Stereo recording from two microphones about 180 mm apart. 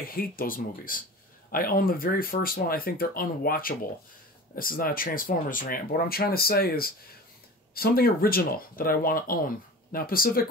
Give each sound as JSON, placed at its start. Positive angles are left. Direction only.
{"t": 0.0, "sound": "speech", "side_deg": 55}